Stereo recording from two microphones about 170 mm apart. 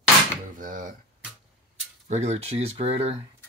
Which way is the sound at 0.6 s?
50° right (ahead or behind).